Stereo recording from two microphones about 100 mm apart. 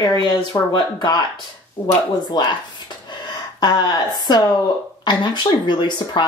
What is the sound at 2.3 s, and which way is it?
Speech, 45° left (ahead or behind).